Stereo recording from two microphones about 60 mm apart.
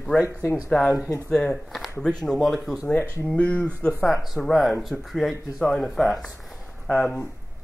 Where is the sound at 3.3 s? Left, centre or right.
Left.